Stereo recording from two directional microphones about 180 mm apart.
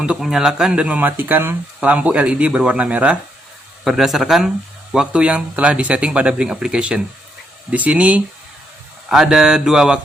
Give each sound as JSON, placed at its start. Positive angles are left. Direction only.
{"t": 0.0, "sound": "speech", "side_deg": -5}